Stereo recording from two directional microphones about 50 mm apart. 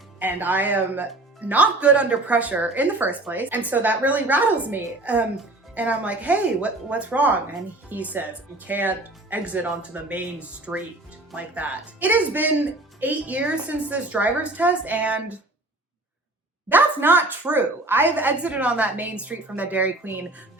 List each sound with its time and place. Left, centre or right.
0.2 s a woman's voice: right
10.7 s a woman's voice: centre
16.6 s speech: right